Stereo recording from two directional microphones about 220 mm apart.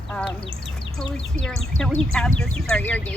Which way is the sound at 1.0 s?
5° left (ahead or behind).